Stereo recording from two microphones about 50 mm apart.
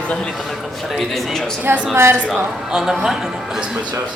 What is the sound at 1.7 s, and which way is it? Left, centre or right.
Speech, right.